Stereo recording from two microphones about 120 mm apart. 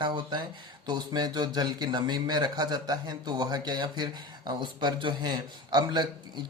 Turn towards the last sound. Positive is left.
turn(degrees=-35)  # may be behind; listen again after turning